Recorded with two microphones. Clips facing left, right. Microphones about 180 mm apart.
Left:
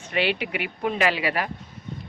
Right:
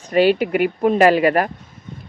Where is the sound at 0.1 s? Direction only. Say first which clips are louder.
Right 10 dB; 40° right (ahead or behind).